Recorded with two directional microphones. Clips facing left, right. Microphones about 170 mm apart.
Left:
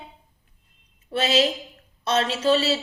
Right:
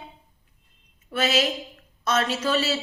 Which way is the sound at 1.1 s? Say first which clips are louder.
Left 2 dB; 30° left (ahead or behind).